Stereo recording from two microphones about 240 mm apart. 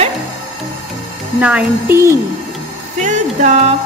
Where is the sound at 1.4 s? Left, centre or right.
Centre.